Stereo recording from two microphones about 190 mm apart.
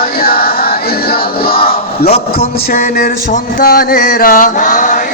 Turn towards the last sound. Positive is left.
turn(degrees=45)  # may be behind; listen again after turning